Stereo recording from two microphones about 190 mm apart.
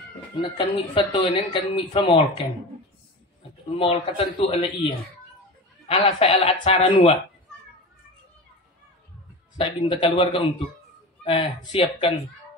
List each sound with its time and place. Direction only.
0.4 s speech: 25° left (ahead or behind)
3.7 s speech: 30° left (ahead or behind)
9.6 s speech: 25° left (ahead or behind)